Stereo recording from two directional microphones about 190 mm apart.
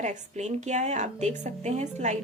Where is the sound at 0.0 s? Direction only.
40° right (ahead or behind).